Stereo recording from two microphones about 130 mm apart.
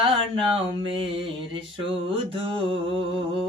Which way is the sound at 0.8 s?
45° right (ahead or behind).